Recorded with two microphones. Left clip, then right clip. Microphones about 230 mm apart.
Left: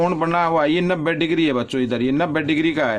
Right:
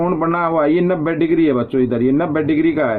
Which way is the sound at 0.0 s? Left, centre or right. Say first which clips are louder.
Right 1 dB; left.